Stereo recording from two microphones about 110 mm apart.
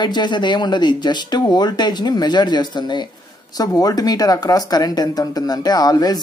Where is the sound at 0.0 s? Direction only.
45° left (ahead or behind).